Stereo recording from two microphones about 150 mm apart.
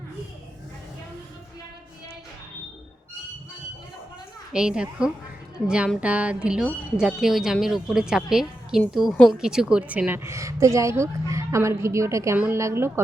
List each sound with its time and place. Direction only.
4.5 s a woman's voice: 5° right (ahead or behind)